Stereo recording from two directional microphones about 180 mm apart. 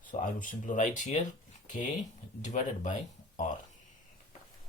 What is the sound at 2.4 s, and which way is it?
Speech, 45° left (ahead or behind).